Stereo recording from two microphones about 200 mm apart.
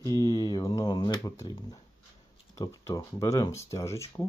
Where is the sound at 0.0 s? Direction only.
20° left (ahead or behind).